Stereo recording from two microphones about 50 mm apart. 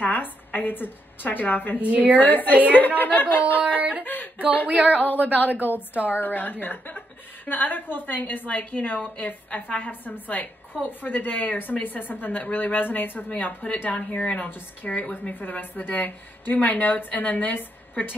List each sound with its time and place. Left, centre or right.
0.0 s a woman's voice: left
1.8 s a woman's voice: right
2.1 s a woman's voice: left
3.6 s music: right
4.0 s a sound: left
5.0 s a woman's voice: left